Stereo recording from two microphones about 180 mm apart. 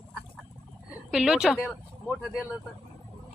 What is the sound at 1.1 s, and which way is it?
Speech, 5° right (ahead or behind).